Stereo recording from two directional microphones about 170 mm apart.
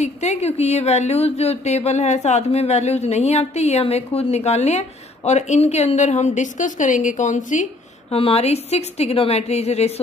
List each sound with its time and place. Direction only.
0.0 s a woman's voice: 40° left (ahead or behind)
8.1 s a woman's voice: 35° left (ahead or behind)